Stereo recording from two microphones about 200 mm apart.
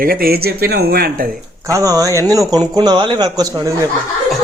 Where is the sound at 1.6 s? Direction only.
15° right (ahead or behind).